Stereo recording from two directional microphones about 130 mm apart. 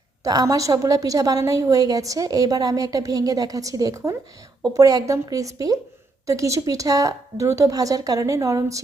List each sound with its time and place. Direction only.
0.3 s a woman's voice: 30° right (ahead or behind)